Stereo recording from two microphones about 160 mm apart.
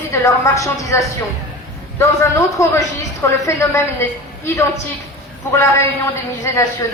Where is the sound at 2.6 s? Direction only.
20° left (ahead or behind).